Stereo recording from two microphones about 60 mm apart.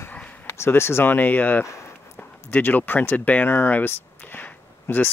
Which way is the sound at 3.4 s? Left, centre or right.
Left.